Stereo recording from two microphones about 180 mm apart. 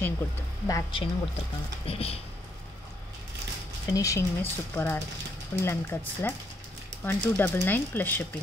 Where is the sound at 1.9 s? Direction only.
35° left (ahead or behind).